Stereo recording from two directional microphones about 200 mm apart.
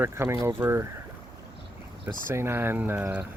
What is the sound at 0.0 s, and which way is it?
Speech, 15° right (ahead or behind).